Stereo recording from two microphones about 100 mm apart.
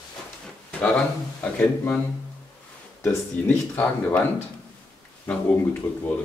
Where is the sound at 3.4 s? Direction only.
15° left (ahead or behind).